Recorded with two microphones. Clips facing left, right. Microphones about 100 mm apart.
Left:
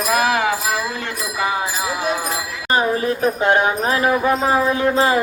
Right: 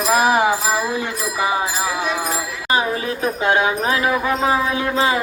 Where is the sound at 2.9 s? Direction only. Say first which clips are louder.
Left 3 dB; 35° left (ahead or behind).